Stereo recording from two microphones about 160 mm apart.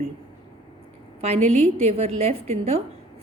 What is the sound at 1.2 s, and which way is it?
A woman's voice, 40° right (ahead or behind).